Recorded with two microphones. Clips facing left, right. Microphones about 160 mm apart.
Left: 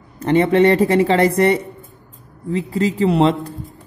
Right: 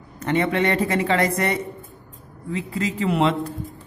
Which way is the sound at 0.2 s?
30° left (ahead or behind).